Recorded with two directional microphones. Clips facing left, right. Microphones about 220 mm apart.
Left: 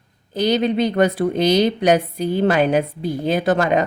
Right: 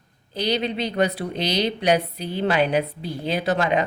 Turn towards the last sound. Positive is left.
turn(degrees=50)  # may be behind; listen again after turning